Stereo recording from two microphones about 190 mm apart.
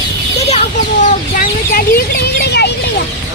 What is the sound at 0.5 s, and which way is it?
Speech, 40° left (ahead or behind).